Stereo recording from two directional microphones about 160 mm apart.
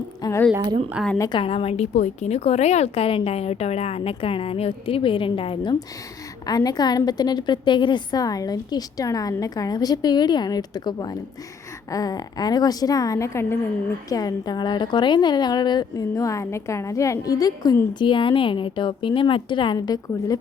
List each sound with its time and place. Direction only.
0.2 s speech: 20° left (ahead or behind)
1.2 s a woman's voice: 30° left (ahead or behind)